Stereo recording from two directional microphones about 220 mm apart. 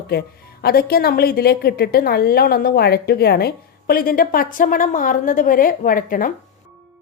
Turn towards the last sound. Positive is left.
turn(degrees=40)  # may be behind; listen again after turning